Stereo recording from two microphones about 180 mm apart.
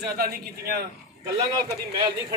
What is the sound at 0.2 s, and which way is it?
Speech, 55° right (ahead or behind).